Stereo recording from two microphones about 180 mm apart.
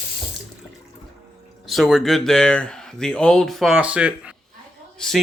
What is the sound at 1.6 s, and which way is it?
Speech, centre (ahead or behind).